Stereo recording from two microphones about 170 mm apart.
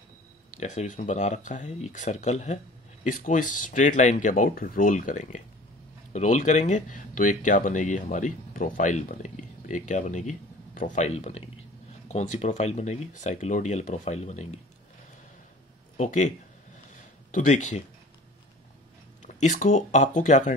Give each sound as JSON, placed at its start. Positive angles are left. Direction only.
{"t": 0.6, "sound": "speech", "side_deg": 45}
{"t": 16.0, "sound": "speech", "side_deg": 45}
{"t": 16.9, "sound": "a sound", "side_deg": 45}
{"t": 19.2, "sound": "speech", "side_deg": 45}